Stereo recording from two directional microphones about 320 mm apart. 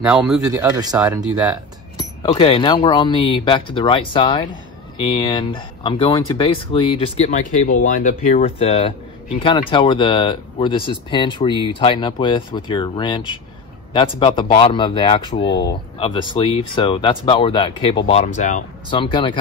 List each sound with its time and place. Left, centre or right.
0.0 s speech: centre
2.0 s speech: centre